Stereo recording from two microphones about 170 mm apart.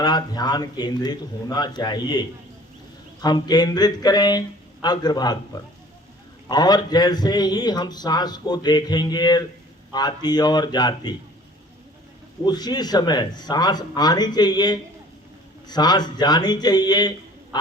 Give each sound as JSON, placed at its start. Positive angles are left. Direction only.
{"t": 0.0, "sound": "a man's voice", "side_deg": 25}
{"t": 6.5, "sound": "a man's voice", "side_deg": 25}
{"t": 12.5, "sound": "a man's voice", "side_deg": 25}